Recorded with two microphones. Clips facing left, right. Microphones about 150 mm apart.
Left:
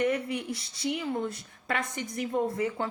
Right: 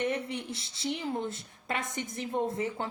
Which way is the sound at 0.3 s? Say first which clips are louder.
Left 4 dB; 25° right (ahead or behind).